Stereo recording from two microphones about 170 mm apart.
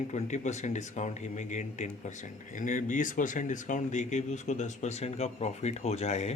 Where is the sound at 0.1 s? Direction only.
45° left (ahead or behind).